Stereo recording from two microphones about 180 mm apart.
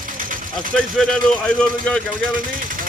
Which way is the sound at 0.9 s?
5° left (ahead or behind).